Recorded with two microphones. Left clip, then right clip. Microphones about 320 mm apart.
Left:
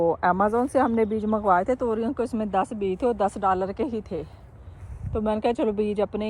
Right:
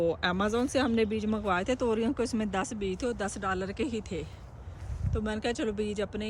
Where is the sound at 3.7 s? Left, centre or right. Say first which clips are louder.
Left 5 dB; centre.